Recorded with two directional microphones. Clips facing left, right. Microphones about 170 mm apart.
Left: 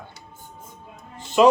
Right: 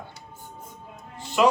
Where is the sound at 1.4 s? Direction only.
25° left (ahead or behind).